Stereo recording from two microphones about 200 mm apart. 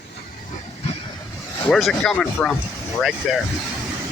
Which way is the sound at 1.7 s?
Centre (ahead or behind).